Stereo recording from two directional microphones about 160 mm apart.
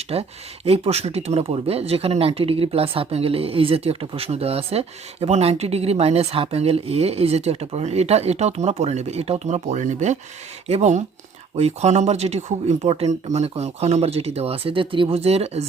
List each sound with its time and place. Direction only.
0.1 s speech: 40° right (ahead or behind)